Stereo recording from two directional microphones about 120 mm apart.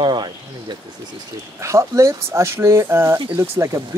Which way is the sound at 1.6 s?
25° right (ahead or behind).